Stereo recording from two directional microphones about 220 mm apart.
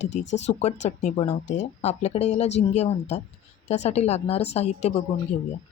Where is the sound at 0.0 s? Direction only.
30° left (ahead or behind).